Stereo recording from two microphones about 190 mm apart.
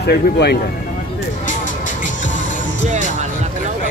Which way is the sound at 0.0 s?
60° left (ahead or behind).